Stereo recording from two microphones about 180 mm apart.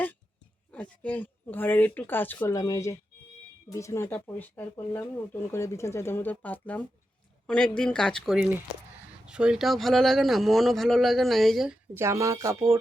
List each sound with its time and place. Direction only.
0.7 s speech: 10° left (ahead or behind)
11.9 s speech: 15° right (ahead or behind)